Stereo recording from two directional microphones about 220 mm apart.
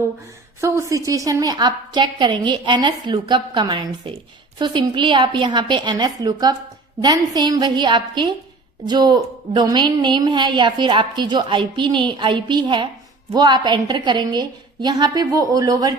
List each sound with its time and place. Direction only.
0.6 s a woman's voice: 15° right (ahead or behind)